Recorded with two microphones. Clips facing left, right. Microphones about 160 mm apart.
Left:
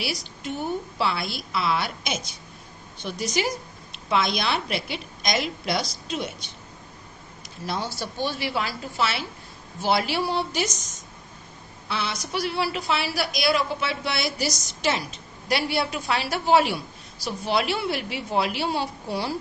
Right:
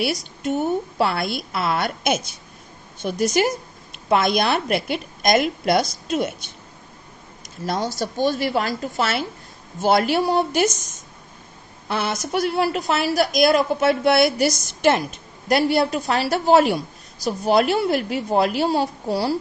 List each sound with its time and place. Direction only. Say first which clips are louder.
0.4 s a woman's voice: right 7 dB; 50° right (ahead or behind)